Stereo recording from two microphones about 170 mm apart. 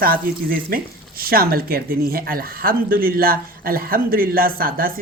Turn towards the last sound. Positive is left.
turn(degrees=-60)  # may be behind; listen again after turning